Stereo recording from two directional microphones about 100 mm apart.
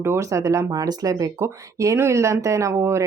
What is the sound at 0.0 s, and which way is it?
Speech, 25° right (ahead or behind).